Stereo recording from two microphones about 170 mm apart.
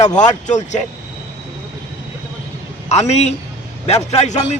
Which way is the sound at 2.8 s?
40° left (ahead or behind).